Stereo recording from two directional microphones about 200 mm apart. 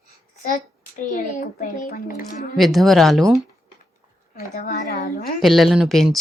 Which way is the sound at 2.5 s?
Centre (ahead or behind).